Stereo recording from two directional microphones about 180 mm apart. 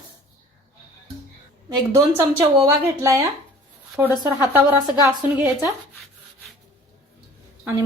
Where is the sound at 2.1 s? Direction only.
15° right (ahead or behind).